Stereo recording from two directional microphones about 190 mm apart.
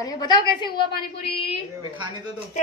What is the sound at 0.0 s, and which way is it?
A woman's voice, 20° left (ahead or behind).